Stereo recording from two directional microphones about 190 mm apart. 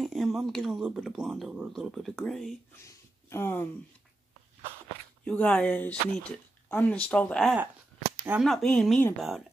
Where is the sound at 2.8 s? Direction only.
15° left (ahead or behind).